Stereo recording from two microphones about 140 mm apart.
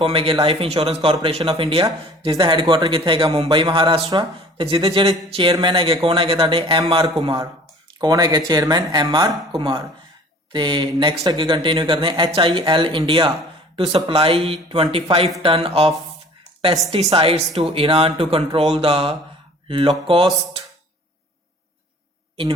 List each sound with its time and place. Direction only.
0.0 s a man's voice: 40° right (ahead or behind)
8.0 s a man's voice: 30° right (ahead or behind)